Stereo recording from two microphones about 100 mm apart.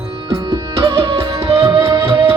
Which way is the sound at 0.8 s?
30° right (ahead or behind).